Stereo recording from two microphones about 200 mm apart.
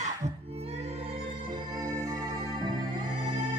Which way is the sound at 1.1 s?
25° right (ahead or behind).